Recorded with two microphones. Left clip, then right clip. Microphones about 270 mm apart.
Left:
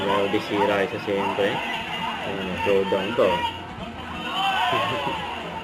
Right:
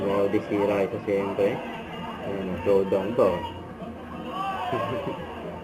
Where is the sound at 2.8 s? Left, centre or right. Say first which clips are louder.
Left 1 dB; centre.